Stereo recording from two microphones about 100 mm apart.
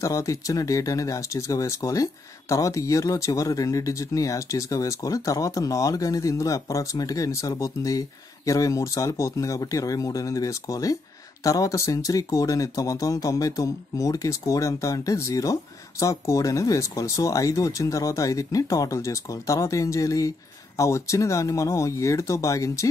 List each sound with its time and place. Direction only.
0.0 s speech: 35° left (ahead or behind)